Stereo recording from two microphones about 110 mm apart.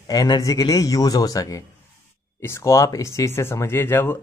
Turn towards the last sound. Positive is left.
turn(degrees=20)  # may be behind; listen again after turning